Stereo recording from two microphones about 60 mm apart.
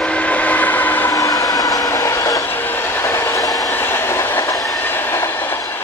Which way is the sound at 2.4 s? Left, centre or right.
Left.